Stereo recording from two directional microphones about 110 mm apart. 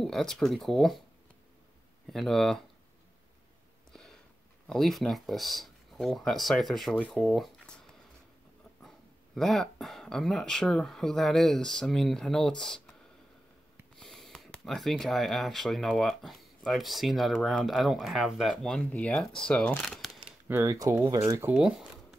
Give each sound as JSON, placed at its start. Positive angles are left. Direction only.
{"t": 0.0, "sound": "speech", "side_deg": 5}
{"t": 2.0, "sound": "speech", "side_deg": 0}
{"t": 3.9, "sound": "a sound", "side_deg": 5}
{"t": 4.6, "sound": "speech", "side_deg": 0}
{"t": 7.1, "sound": "a sound", "side_deg": 0}
{"t": 8.8, "sound": "speech", "side_deg": 5}
{"t": 13.9, "sound": "speech", "side_deg": 5}
{"t": 20.2, "sound": "a sound", "side_deg": -15}
{"t": 20.6, "sound": "speech", "side_deg": -30}
{"t": 21.5, "sound": "speech", "side_deg": -10}